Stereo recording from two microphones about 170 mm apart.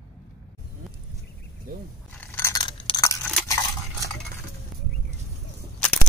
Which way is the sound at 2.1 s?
10° left (ahead or behind).